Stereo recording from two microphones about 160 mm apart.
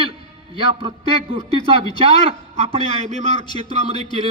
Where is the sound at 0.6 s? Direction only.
35° right (ahead or behind).